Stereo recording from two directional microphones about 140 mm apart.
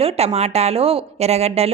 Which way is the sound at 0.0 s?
50° right (ahead or behind).